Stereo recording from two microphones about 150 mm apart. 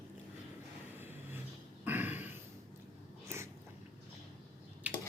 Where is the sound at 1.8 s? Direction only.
10° right (ahead or behind).